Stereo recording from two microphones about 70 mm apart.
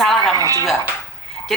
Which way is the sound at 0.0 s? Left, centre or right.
Centre.